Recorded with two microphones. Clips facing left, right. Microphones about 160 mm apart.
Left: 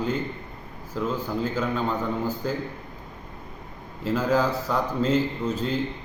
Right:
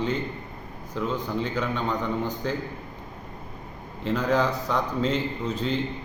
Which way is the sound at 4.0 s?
5° left (ahead or behind).